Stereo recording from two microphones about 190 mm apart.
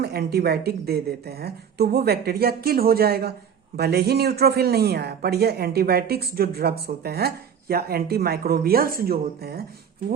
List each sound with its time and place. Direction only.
0.0 s speech: 55° right (ahead or behind)